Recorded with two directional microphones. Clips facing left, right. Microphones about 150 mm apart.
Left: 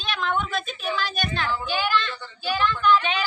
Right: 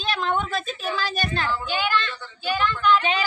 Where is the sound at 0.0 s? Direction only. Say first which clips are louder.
Right 2 dB; 35° right (ahead or behind).